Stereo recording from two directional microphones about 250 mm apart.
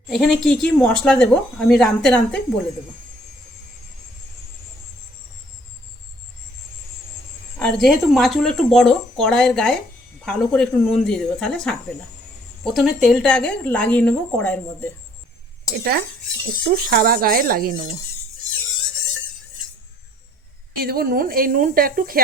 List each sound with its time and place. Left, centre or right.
0.1 s a woman's voice: centre
7.6 s a woman's voice: centre
15.8 s speech: right
20.7 s speech: right